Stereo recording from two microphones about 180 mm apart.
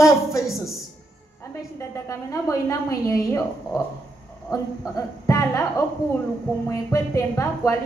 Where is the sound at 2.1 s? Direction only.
15° left (ahead or behind).